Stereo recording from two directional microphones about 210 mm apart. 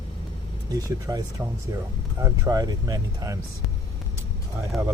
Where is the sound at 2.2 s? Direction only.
15° right (ahead or behind).